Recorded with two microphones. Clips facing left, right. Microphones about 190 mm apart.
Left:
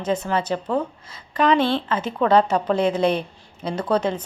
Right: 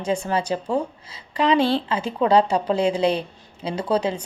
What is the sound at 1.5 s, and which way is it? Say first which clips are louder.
Speech: right 1 dB; 35° right (ahead or behind).